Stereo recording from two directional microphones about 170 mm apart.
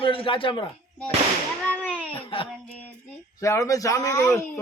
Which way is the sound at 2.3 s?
30° left (ahead or behind).